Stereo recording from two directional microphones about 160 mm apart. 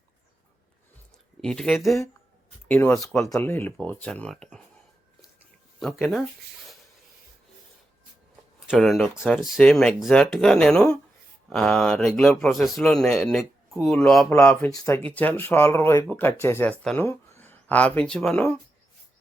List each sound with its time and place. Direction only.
1.4 s speech: 5° left (ahead or behind)
5.8 s speech: centre (ahead or behind)
8.6 s speech: centre (ahead or behind); by 15.0 s 20° left (ahead or behind)
15.0 s speech: 10° left (ahead or behind)